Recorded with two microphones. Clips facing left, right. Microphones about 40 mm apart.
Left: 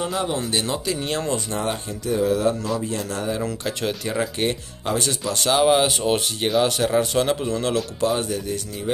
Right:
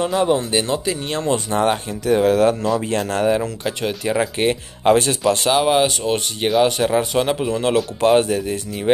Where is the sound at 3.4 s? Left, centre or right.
Centre.